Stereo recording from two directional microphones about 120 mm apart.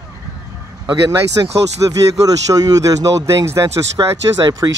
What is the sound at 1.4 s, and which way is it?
Speech, 35° right (ahead or behind).